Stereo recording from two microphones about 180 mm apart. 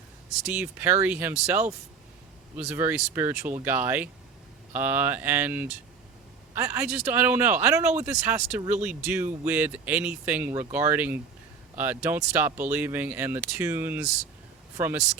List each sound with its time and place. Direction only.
0.3 s speech: 5° right (ahead or behind)
2.6 s speech: 10° right (ahead or behind)